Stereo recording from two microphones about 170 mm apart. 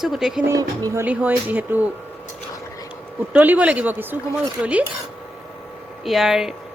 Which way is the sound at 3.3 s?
10° right (ahead or behind).